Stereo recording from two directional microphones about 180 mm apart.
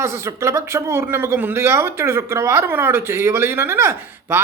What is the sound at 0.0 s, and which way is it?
Speech, 15° right (ahead or behind).